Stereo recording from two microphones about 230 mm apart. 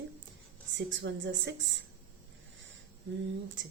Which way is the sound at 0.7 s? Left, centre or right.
Right.